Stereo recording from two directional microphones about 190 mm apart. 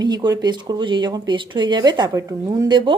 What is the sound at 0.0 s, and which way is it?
A woman's voice, 20° right (ahead or behind).